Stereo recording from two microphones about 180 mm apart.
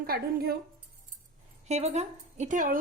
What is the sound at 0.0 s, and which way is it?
Speech, 55° right (ahead or behind).